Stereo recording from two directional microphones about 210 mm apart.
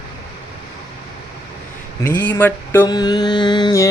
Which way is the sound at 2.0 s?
10° left (ahead or behind).